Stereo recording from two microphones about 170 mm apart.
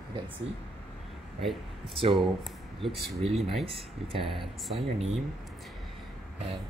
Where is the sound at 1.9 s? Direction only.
35° right (ahead or behind).